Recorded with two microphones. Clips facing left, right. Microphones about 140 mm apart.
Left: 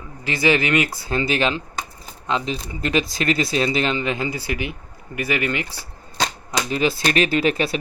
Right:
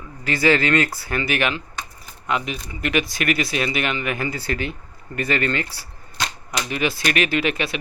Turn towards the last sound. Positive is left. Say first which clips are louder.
# left 3 dB
turn(degrees=35)  # may be behind; listen again after turning